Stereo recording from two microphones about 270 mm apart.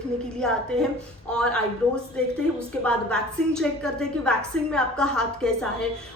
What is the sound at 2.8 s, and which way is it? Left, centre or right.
A woman's voice, centre.